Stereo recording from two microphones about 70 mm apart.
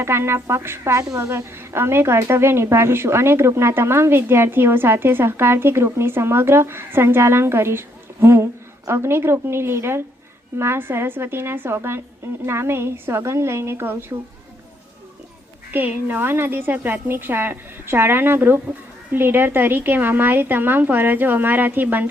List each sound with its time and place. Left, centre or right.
0.0 s a woman's voice: right
14.1 s a woman's voice: right
15.7 s a woman's voice: right